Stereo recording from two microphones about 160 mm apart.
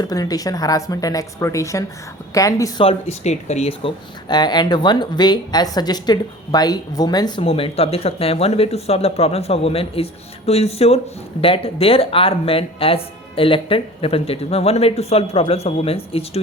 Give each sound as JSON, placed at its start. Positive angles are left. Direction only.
{"t": 0.0, "sound": "a woman's voice", "side_deg": 25}
{"t": 2.8, "sound": "speech", "side_deg": 45}